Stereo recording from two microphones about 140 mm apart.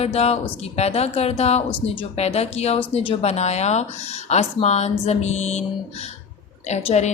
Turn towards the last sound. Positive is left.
turn(degrees=55)  # may be behind; listen again after turning